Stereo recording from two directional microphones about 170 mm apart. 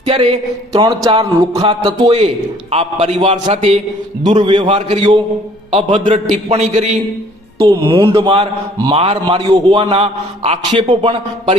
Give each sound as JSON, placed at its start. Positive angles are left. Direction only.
{"t": 0.0, "sound": "a sound", "side_deg": -35}
{"t": 0.7, "sound": "a man's voice", "side_deg": -25}
{"t": 4.4, "sound": "speech", "side_deg": -30}
{"t": 4.7, "sound": "a man's voice", "side_deg": -40}
{"t": 5.7, "sound": "a man's voice", "side_deg": -30}
{"t": 6.3, "sound": "a man's voice", "side_deg": -40}
{"t": 7.6, "sound": "speech", "side_deg": -25}
{"t": 8.8, "sound": "speech", "side_deg": -35}
{"t": 9.8, "sound": "a man's voice", "side_deg": -35}